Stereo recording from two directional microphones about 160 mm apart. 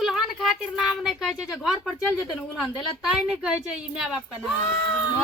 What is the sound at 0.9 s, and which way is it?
Speech, centre (ahead or behind).